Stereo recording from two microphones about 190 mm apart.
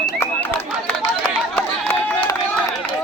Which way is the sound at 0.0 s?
10° left (ahead or behind).